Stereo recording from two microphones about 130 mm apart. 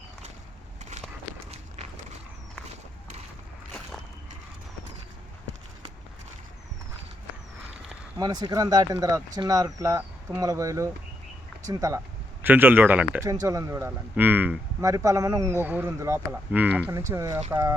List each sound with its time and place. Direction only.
1.5 s walk: 55° right (ahead or behind)
2.6 s a sound: 60° right (ahead or behind)
8.2 s speech: 35° right (ahead or behind); by 13.2 s 15° right (ahead or behind)
13.4 s speech: 25° right (ahead or behind)
14.8 s speech: 25° right (ahead or behind)
16.3 s speech: 10° right (ahead or behind)
16.9 s speech: 25° right (ahead or behind)